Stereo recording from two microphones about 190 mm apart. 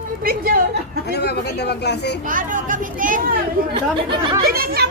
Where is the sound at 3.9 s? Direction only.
25° right (ahead or behind).